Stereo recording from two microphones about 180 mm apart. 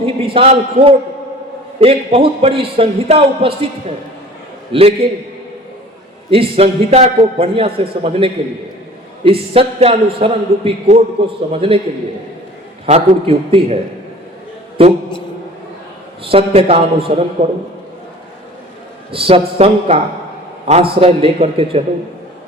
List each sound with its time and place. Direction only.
0.0 s a man's voice: 30° right (ahead or behind)
4.7 s a man's voice: 30° right (ahead or behind)
6.3 s a man's voice: 30° right (ahead or behind)
12.8 s a man's voice: 30° right (ahead or behind)
14.8 s a man's voice: 30° right (ahead or behind)
16.2 s a man's voice: 30° right (ahead or behind)
19.1 s a man's voice: 30° right (ahead or behind)